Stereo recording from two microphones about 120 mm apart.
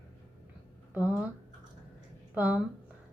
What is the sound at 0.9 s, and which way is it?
Speech, 15° right (ahead or behind).